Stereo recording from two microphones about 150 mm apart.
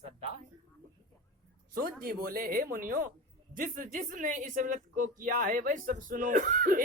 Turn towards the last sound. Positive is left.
turn(degrees=-65)  # may be behind; listen again after turning